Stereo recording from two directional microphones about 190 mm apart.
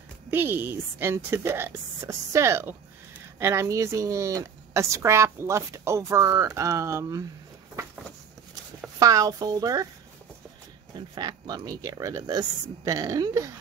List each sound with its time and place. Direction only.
0.3 s a woman's voice: 10° right (ahead or behind)
9.0 s speech: 20° right (ahead or behind)
11.1 s speech: 20° right (ahead or behind)